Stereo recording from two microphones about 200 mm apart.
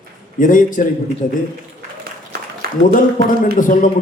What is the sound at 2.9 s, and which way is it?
Speech, 40° left (ahead or behind).